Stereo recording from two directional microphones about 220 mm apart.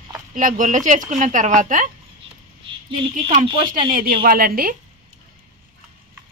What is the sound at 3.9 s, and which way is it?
Speech, 45° right (ahead or behind).